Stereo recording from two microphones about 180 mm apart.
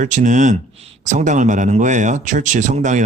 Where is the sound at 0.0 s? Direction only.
45° right (ahead or behind).